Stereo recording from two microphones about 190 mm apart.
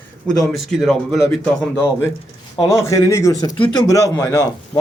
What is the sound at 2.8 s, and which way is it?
Speech, 15° left (ahead or behind).